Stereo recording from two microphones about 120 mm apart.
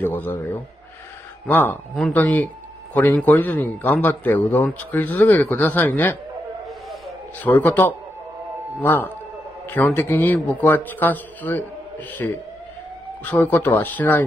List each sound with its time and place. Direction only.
0.0 s a man's voice: 15° left (ahead or behind)
7.4 s a man's voice: 15° left (ahead or behind)
13.2 s a man's voice: 15° left (ahead or behind)